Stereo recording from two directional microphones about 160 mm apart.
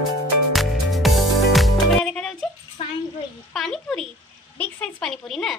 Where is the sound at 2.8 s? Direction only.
35° left (ahead or behind).